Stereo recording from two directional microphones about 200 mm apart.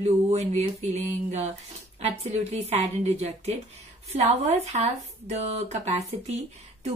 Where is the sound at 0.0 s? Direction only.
30° right (ahead or behind).